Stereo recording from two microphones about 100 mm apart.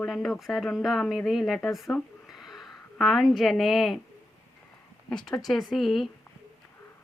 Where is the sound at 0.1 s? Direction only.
Centre (ahead or behind).